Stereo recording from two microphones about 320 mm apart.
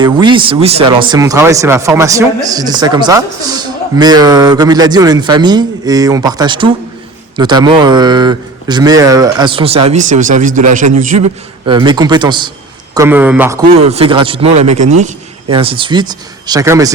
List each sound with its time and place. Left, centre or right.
0.0 s a man's voice: centre
13.8 s a man's voice: centre